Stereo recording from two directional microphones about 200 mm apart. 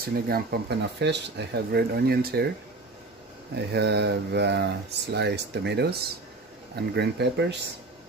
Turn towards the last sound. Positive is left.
turn(degrees=-60)  # may be behind; listen again after turning